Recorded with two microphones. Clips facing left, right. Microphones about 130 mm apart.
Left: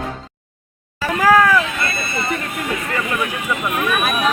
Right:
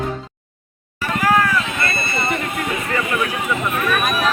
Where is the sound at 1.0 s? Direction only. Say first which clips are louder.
Left 3 dB; 90° left.